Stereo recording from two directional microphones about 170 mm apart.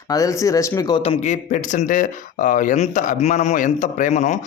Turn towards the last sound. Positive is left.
turn(degrees=45)  # may be behind; listen again after turning